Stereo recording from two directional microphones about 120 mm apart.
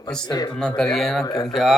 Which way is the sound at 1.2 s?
30° left (ahead or behind).